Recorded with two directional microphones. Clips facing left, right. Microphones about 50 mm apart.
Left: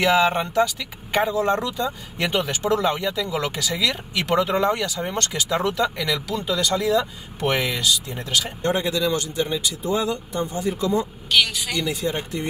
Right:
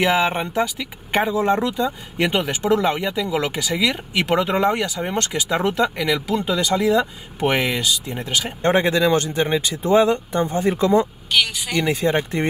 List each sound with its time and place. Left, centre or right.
0.0 s speech: centre
8.6 s speech: right
11.3 s speech: centre
11.7 s speech: right